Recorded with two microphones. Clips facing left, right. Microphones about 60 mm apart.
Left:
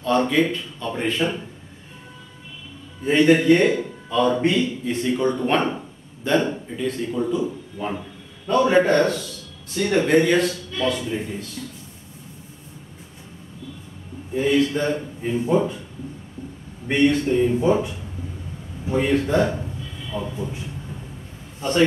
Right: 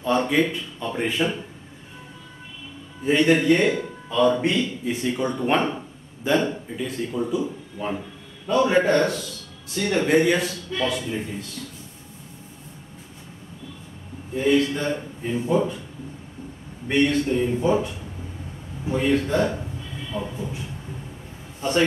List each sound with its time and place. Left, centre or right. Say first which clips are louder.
0.3 s speech: left 1 dB; centre
3.1 s a man's voice: left 3 dB; centre
5.7 s a sound: left 2 dB; centre
6.8 s a man's voice: left 3 dB; centre
9.8 s speech: left 3 dB; centre
10.0 s a man's voice: left 1 dB; centre
14.3 s a man's voice: left 1 dB; centre
16.8 s speech: left 2 dB; centre
21.5 s a man's voice: left 2 dB; centre